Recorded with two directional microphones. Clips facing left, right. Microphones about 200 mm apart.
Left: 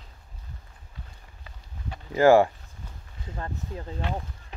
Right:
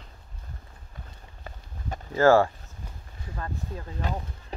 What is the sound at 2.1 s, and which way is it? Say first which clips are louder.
Speech: left 2 dB; 15° left (ahead or behind).